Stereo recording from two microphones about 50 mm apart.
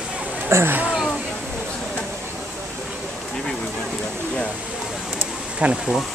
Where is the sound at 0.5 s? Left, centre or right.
Right.